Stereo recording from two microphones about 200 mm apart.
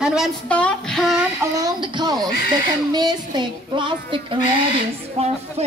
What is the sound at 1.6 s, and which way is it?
Speech, 20° right (ahead or behind).